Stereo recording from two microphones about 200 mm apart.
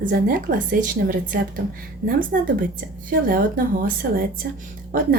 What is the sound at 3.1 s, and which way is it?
A woman's voice, 45° right (ahead or behind).